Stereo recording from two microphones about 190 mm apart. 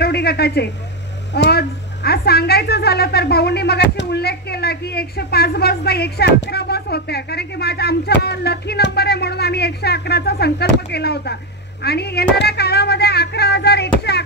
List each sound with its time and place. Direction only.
0.0 s a woman's voice: 55° left (ahead or behind)